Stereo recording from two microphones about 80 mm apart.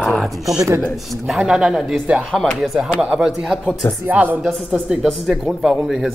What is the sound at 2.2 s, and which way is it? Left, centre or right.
Speech, centre.